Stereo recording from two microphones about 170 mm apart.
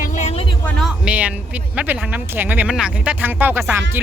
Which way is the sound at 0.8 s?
5° right (ahead or behind).